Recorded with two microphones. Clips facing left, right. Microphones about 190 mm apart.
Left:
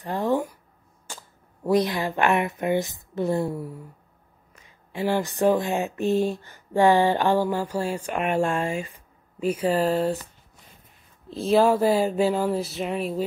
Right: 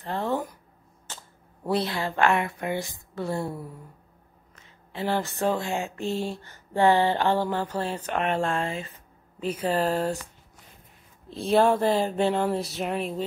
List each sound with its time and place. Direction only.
0.0 s a sound: 15° left (ahead or behind)
1.7 s speech: 15° left (ahead or behind)
4.9 s speech: 15° left (ahead or behind)
11.2 s speech: centre (ahead or behind)